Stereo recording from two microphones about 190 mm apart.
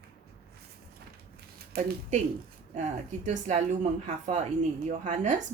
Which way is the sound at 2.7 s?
40° right (ahead or behind).